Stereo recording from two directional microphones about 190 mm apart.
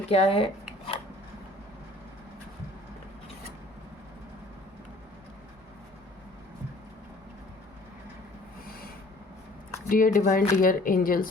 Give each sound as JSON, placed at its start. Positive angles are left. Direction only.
{"t": 0.1, "sound": "speech", "side_deg": 30}
{"t": 9.9, "sound": "speech", "side_deg": 45}